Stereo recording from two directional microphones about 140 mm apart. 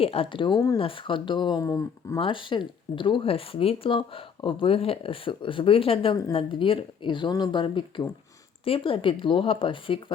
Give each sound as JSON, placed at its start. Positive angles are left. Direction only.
{"t": 0.0, "sound": "speech", "side_deg": 45}
{"t": 2.1, "sound": "speech", "side_deg": 40}